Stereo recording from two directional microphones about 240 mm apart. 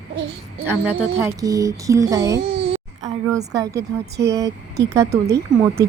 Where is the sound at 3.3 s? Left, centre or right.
Centre.